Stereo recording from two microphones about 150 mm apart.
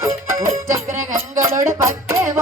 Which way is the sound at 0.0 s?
20° right (ahead or behind).